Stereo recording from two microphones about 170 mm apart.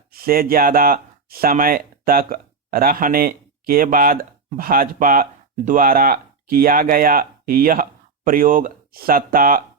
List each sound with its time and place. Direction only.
0.1 s speech: 60° right (ahead or behind)